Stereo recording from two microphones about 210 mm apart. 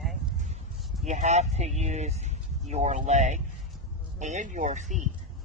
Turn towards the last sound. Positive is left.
turn(degrees=-35)  # may be behind; listen again after turning